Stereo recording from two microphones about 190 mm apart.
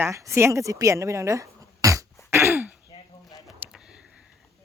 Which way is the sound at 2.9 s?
20° left (ahead or behind).